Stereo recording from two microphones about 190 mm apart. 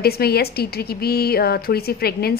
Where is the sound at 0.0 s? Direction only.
55° left (ahead or behind).